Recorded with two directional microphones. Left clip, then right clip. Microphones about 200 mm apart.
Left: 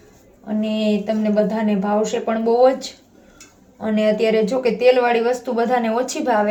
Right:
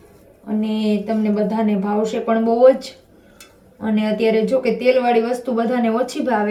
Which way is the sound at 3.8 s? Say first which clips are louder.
Left 1 dB; 35° left (ahead or behind).